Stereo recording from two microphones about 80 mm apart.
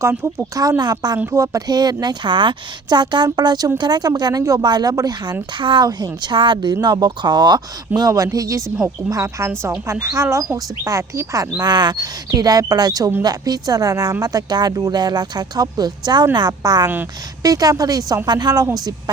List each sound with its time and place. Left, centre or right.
0.0 s speech: right
0.8 s speech: right
1.3 s speech: right
6.8 s speech: right